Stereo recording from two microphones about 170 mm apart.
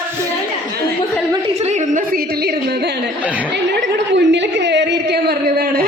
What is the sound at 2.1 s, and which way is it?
Music, 65° right (ahead or behind).